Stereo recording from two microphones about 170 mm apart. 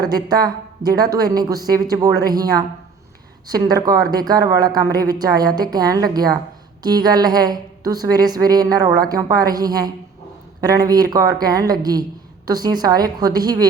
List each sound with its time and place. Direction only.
0.0 s a woman's voice: 25° right (ahead or behind)
3.5 s a woman's voice: 20° right (ahead or behind)